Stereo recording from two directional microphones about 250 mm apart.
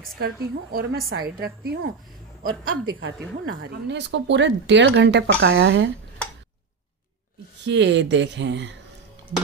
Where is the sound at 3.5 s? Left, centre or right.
Right.